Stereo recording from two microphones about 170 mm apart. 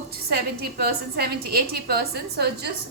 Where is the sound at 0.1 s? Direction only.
65° right (ahead or behind).